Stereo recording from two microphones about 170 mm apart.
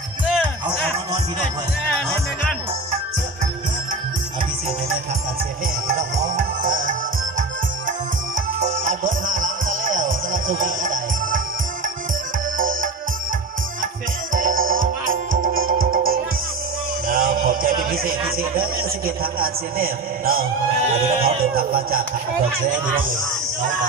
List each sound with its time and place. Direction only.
5.9 s music: 50° right (ahead or behind)
8.6 s music: 50° right (ahead or behind)
14.3 s music: 55° right (ahead or behind)
18.4 s a man's voice: 60° right (ahead or behind)